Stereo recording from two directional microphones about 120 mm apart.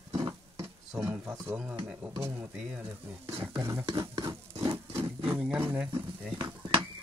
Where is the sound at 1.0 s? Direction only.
15° right (ahead or behind).